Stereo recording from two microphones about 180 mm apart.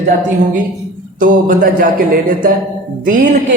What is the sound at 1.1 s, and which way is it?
Speech, 50° right (ahead or behind).